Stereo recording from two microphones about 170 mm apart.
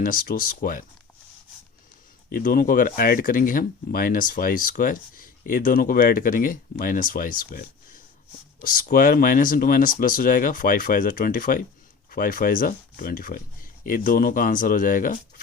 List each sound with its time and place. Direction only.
0.0 s speech: 55° left (ahead or behind)
2.3 s speech: 55° left (ahead or behind)
8.6 s speech: 55° left (ahead or behind)